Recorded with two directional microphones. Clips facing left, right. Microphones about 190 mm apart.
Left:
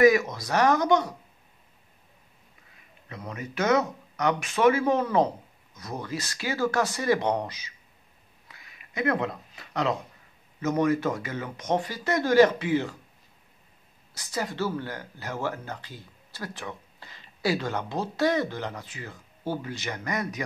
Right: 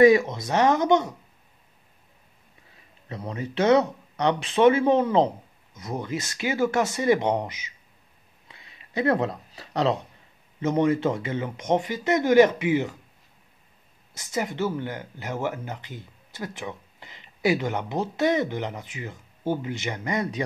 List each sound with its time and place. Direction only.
0.0 s speech: 30° right (ahead or behind)
3.1 s speech: 30° right (ahead or behind)
8.5 s a sound: 25° right (ahead or behind)
10.6 s speech: 25° right (ahead or behind)
14.1 s speech: 20° right (ahead or behind)